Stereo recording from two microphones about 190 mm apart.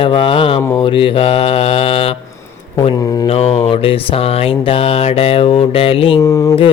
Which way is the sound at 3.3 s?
35° left (ahead or behind).